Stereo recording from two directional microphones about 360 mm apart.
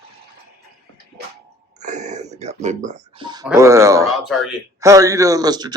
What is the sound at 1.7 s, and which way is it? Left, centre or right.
Speech, centre.